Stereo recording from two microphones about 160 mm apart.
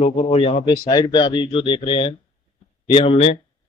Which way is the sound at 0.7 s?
30° left (ahead or behind).